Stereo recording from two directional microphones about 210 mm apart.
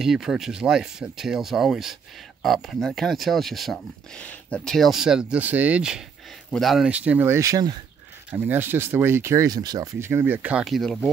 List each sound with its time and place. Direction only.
0.0 s speech: centre (ahead or behind)